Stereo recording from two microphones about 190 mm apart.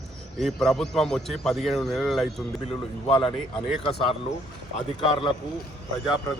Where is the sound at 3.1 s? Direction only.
25° left (ahead or behind).